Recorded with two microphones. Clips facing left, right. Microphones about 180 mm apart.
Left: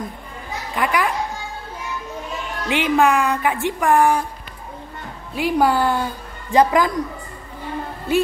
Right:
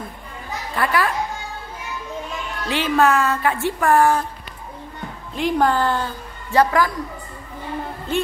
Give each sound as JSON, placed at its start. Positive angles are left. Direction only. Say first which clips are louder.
{"t": 0.7, "sound": "speech", "louder": "even", "side_deg": 15}
{"t": 2.7, "sound": "speech", "louder": "left 1 dB", "side_deg": 15}
{"t": 5.3, "sound": "a woman's voice", "louder": "left 1 dB", "side_deg": 10}
{"t": 8.1, "sound": "speech", "louder": "left 4 dB", "side_deg": 10}